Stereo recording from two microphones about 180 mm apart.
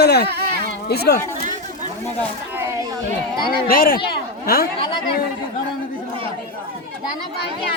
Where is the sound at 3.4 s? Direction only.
55° left (ahead or behind).